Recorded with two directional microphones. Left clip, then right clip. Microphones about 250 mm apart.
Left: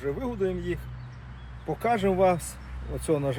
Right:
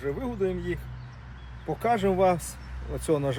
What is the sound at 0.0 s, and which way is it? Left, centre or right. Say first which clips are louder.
Speech: even; centre.